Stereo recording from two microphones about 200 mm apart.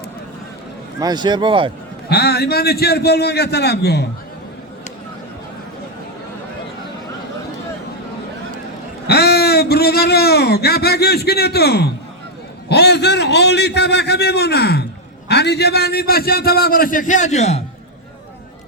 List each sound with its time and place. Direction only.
0.9 s speech: 20° right (ahead or behind)
2.0 s a man's voice: 55° left (ahead or behind)
9.0 s a man's voice: 55° left (ahead or behind); by 17.6 s 35° left (ahead or behind)